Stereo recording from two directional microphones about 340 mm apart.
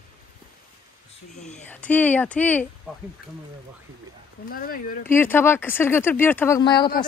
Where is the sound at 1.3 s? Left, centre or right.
Centre.